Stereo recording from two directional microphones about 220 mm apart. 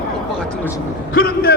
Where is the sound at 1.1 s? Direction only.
45° left (ahead or behind).